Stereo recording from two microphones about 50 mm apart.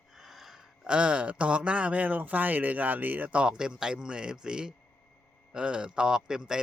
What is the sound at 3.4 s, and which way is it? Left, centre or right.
A man's voice, centre.